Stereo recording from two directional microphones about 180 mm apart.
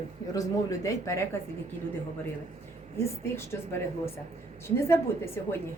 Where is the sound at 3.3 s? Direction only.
15° left (ahead or behind).